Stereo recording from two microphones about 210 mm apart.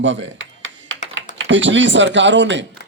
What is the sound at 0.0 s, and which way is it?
Computer keyboard, 60° right (ahead or behind).